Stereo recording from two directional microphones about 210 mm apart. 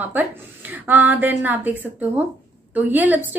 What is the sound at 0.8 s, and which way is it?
A woman's voice, 10° right (ahead or behind).